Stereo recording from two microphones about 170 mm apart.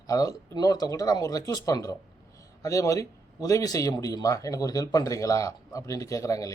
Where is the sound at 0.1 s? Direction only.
20° left (ahead or behind).